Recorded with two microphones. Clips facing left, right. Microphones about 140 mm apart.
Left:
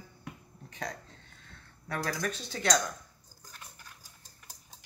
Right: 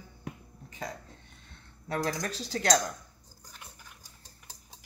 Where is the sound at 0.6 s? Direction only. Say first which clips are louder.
Even; 5° right (ahead or behind).